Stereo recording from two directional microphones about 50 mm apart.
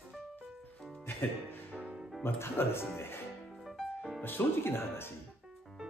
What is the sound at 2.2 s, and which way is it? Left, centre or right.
Speech, left.